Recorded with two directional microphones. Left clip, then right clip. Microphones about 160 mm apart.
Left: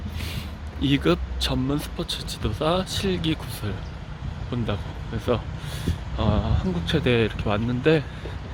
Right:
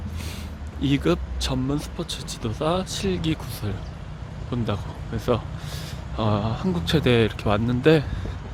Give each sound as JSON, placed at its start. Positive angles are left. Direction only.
{"t": 0.3, "sound": "speech", "side_deg": 0}
{"t": 4.5, "sound": "speech", "side_deg": -15}